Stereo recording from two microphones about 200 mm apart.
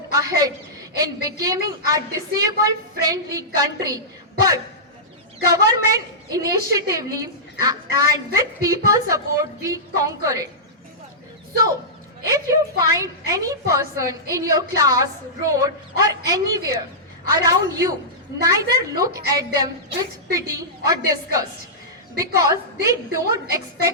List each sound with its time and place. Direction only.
0.1 s a woman's voice: 15° right (ahead or behind)
12.3 s a woman's voice: 15° right (ahead or behind)
22.2 s a woman's voice: 15° right (ahead or behind)